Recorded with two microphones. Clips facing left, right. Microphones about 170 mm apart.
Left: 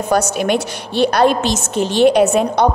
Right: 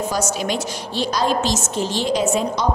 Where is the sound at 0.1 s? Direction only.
60° left (ahead or behind).